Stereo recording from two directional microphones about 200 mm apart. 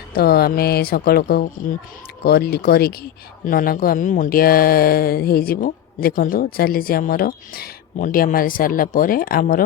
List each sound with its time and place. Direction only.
0.1 s speech: 50° left (ahead or behind)